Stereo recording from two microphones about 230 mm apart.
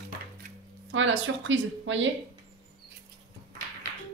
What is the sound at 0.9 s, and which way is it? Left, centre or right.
Speech, right.